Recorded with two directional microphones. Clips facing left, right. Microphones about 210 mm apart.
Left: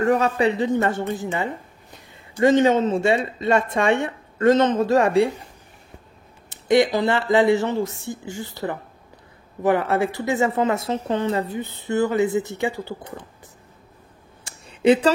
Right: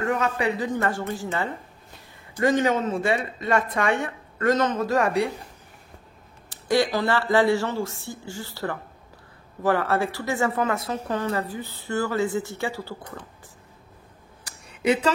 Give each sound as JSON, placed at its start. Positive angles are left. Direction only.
{"t": 0.0, "sound": "speech", "side_deg": 30}
{"t": 6.5, "sound": "speech", "side_deg": 20}
{"t": 14.4, "sound": "a sound", "side_deg": 25}